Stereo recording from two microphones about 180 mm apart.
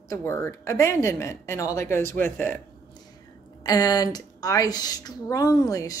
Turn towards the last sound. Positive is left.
turn(degrees=20)  # may be behind; listen again after turning